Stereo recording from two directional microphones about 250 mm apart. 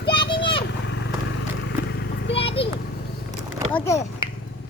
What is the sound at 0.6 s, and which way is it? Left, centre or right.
Vehicle, left.